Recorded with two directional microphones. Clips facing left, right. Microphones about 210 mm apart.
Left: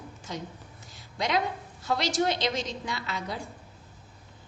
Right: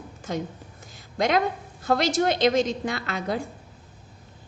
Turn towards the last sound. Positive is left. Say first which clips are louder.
# right 6 dB
turn(degrees=-55)  # may be behind; listen again after turning